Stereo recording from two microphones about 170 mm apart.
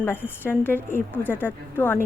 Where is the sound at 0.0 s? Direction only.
10° left (ahead or behind).